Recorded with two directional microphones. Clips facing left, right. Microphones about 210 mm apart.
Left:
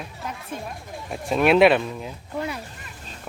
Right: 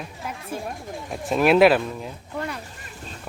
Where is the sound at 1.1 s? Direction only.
Centre (ahead or behind).